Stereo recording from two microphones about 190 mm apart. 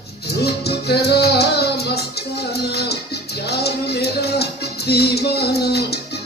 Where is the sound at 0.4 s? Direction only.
60° left (ahead or behind).